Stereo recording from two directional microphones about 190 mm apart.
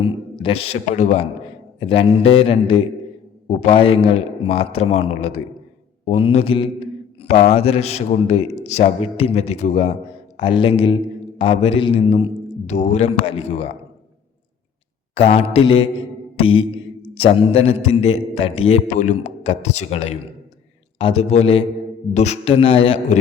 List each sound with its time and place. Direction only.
0.0 s a man's voice: 30° left (ahead or behind)
15.1 s a man's voice: 30° left (ahead or behind)
16.4 s mantra: 30° left (ahead or behind)
17.2 s a man's voice: 30° left (ahead or behind)